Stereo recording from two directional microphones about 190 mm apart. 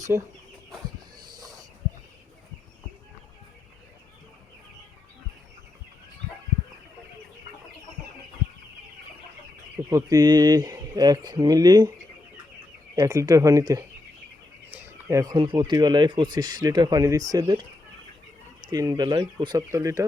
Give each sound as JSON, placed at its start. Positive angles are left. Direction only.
{"t": 0.1, "sound": "speech", "side_deg": -15}
{"t": 1.2, "sound": "a sound", "side_deg": -20}
{"t": 9.9, "sound": "speech", "side_deg": -20}
{"t": 13.0, "sound": "speech", "side_deg": -15}
{"t": 14.8, "sound": "speech", "side_deg": -15}
{"t": 18.7, "sound": "speech", "side_deg": -20}